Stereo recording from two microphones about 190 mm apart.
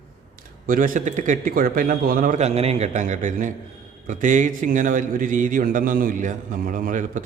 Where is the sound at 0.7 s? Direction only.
45° right (ahead or behind).